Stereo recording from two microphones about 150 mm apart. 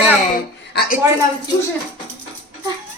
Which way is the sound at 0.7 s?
90° left.